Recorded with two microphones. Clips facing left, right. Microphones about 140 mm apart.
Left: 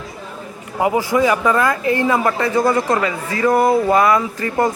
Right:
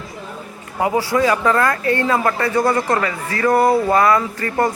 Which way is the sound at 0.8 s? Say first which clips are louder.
Left 1 dB; 20° left (ahead or behind).